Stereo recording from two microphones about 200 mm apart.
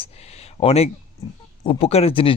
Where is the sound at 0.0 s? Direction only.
30° left (ahead or behind).